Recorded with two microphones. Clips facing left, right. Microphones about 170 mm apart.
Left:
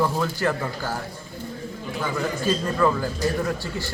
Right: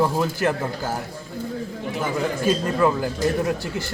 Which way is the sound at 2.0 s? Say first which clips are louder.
Right 3 dB; 15° right (ahead or behind).